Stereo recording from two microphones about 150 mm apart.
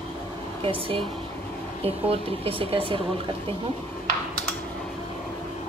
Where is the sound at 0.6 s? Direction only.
35° right (ahead or behind).